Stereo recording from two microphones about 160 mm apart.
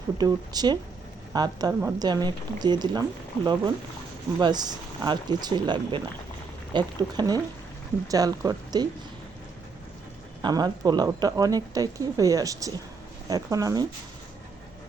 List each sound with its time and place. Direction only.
0.2 s speech: 25° right (ahead or behind)
4.4 s speech: 25° right (ahead or behind)
10.4 s speech: 25° right (ahead or behind)